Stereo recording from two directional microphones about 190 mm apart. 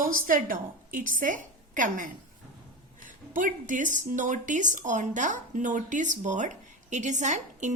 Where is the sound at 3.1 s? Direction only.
45° right (ahead or behind).